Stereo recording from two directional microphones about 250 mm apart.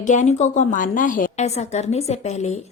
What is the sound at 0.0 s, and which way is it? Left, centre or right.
A woman's voice, left.